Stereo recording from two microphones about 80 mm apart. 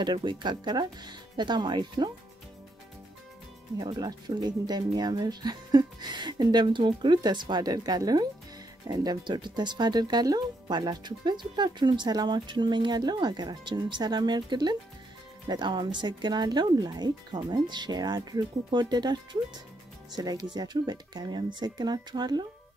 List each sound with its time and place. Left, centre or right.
0.0 s speech: right
3.8 s speech: right
20.2 s speech: right
20.5 s speech: right